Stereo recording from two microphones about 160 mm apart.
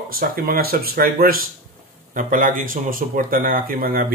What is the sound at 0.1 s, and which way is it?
Speech, 65° right (ahead or behind).